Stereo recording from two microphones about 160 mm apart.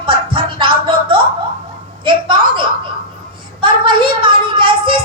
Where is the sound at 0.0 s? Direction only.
30° right (ahead or behind).